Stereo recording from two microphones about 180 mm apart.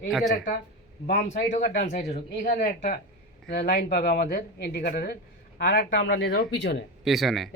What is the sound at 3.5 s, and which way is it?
Speech, 65° left (ahead or behind).